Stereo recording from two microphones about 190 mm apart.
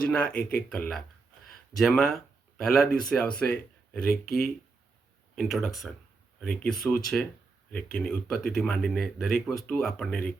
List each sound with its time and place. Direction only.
0.0 s speech: 5° left (ahead or behind)
4.3 s speech: 50° left (ahead or behind)
5.4 s speech: centre (ahead or behind)